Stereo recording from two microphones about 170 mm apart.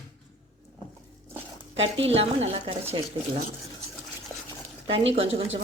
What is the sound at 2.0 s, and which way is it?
Speech, 35° right (ahead or behind).